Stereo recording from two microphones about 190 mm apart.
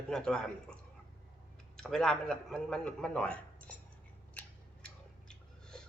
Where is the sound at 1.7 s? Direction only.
Centre (ahead or behind).